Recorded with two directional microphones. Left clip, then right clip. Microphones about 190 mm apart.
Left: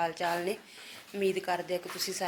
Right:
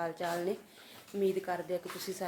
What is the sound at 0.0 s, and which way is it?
A woman's voice, 5° right (ahead or behind).